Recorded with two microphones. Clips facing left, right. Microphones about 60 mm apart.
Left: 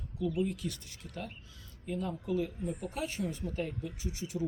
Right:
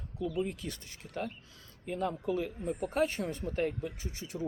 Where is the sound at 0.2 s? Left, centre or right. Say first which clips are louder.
Left 1 dB; right.